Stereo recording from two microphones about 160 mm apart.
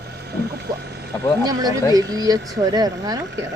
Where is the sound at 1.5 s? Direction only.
25° right (ahead or behind).